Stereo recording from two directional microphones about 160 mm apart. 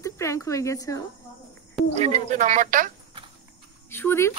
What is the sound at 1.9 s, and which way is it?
Speech, 45° right (ahead or behind).